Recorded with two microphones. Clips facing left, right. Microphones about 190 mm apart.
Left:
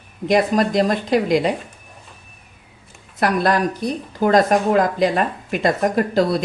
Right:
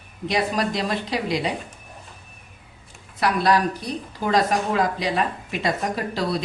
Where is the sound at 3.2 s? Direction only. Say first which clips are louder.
Left 2 dB; 50° left (ahead or behind).